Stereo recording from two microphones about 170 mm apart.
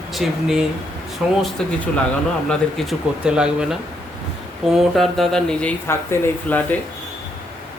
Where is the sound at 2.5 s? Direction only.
Centre (ahead or behind).